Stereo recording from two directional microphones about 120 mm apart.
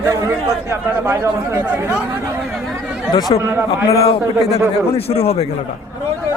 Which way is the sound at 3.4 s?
20° right (ahead or behind).